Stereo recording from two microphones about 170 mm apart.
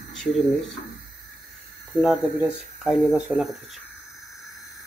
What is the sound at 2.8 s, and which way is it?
Speech, 5° right (ahead or behind).